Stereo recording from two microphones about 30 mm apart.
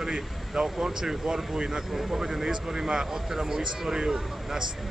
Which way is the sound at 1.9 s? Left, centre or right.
Centre.